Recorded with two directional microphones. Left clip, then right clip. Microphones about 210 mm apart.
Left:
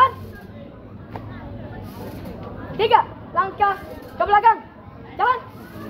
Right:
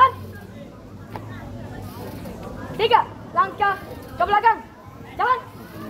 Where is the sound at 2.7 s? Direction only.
40° left (ahead or behind).